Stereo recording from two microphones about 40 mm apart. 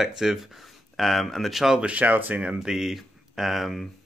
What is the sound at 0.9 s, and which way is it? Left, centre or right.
Speech, centre.